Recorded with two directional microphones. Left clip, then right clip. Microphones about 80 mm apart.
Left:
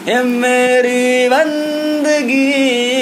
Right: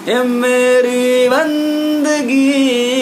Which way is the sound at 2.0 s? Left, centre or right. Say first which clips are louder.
Left 3 dB; right.